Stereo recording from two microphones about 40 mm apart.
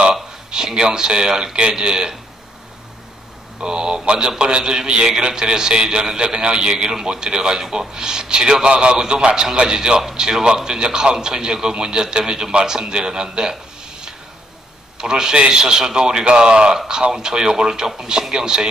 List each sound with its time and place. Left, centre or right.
0.1 s a man's voice: centre
3.6 s a man's voice: right
14.9 s a man's voice: centre